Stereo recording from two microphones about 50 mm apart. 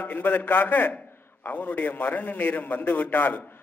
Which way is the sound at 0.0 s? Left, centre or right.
Left.